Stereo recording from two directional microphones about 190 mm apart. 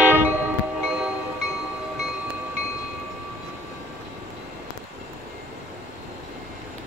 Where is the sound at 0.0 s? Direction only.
10° right (ahead or behind).